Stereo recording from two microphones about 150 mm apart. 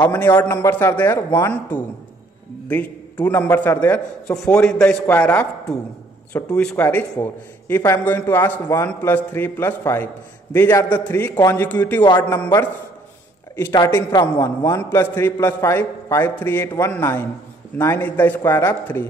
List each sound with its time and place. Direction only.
0.4 s a man's voice: 15° left (ahead or behind)
13.8 s a man's voice: 20° left (ahead or behind)